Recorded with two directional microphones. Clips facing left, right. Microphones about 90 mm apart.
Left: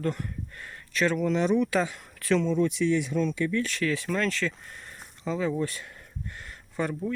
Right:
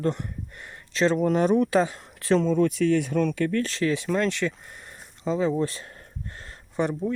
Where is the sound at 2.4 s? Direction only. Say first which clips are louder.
Right 3 dB; 50° right (ahead or behind).